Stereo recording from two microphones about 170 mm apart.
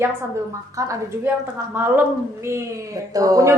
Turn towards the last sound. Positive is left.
turn(degrees=-20)  # may be behind; listen again after turning